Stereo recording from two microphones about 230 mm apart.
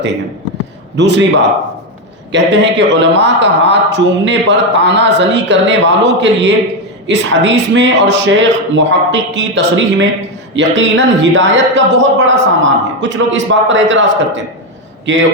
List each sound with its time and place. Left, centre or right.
0.9 s a man's voice: right